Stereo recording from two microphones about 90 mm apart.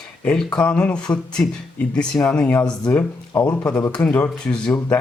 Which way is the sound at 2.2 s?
15° left (ahead or behind).